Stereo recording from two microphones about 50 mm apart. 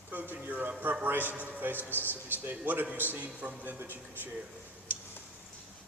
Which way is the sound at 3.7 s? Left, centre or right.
Right.